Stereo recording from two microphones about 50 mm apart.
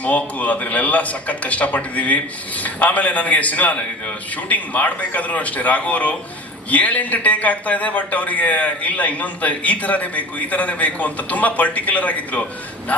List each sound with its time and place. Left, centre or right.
0.0 s a man's voice: left